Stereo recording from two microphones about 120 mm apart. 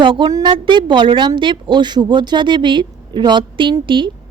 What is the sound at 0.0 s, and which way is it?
A woman's voice, 45° right (ahead or behind).